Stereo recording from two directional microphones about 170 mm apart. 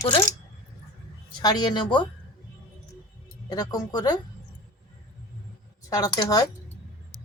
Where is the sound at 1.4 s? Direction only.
25° left (ahead or behind).